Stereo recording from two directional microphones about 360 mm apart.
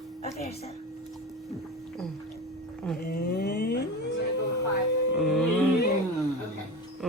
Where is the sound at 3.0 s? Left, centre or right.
Left.